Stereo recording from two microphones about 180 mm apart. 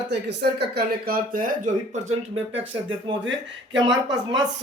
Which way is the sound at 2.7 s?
25° right (ahead or behind).